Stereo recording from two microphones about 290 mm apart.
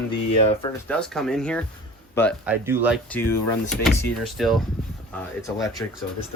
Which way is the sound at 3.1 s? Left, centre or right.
Centre.